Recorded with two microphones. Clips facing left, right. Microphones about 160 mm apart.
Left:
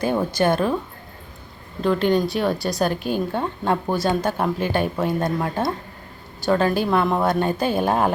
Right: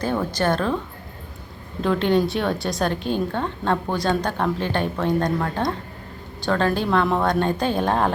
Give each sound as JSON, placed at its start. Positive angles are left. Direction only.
{"t": 0.0, "sound": "a woman's voice", "side_deg": 15}
{"t": 1.8, "sound": "a woman's voice", "side_deg": 0}